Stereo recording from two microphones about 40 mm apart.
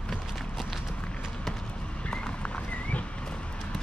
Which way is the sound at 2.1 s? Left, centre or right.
Left.